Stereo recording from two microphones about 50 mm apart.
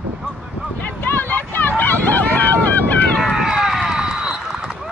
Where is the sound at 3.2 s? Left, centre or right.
Centre.